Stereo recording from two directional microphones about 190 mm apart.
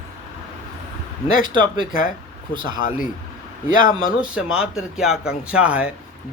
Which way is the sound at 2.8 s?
45° left (ahead or behind).